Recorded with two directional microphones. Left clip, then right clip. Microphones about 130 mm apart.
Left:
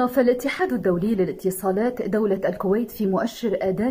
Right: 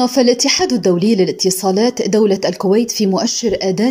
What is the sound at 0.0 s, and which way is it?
A woman's voice, 15° right (ahead or behind).